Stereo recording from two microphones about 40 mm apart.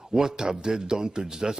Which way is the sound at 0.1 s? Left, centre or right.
Centre.